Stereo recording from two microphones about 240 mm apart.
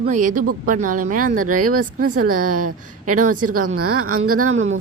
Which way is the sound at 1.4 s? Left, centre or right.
Right.